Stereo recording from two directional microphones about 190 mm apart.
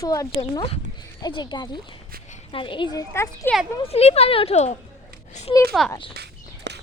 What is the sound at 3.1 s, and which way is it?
Speech, 10° left (ahead or behind).